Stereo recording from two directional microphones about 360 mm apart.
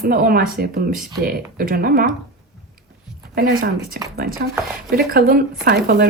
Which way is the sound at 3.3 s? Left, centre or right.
Right.